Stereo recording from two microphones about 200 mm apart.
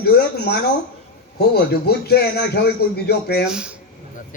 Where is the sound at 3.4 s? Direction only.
5° right (ahead or behind).